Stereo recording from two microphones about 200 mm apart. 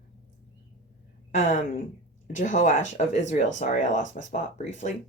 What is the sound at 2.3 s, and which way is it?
Speech, 40° left (ahead or behind).